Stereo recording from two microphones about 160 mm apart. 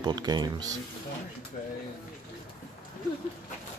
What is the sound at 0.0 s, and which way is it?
Speech, 25° right (ahead or behind).